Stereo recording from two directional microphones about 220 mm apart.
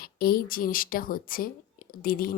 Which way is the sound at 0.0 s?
45° left (ahead or behind).